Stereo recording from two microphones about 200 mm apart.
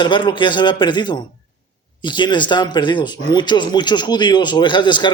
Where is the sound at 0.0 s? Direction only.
25° left (ahead or behind).